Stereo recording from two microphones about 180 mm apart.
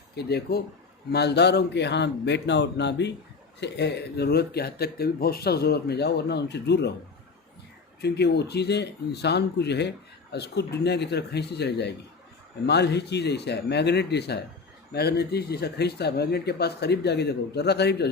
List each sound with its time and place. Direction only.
0.2 s speech: 65° left (ahead or behind)
8.0 s speech: 65° left (ahead or behind)